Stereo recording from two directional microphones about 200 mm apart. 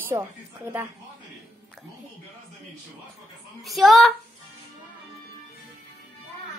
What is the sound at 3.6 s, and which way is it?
Speech, centre (ahead or behind).